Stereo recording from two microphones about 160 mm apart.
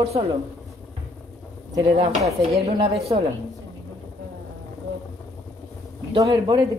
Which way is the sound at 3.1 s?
25° right (ahead or behind).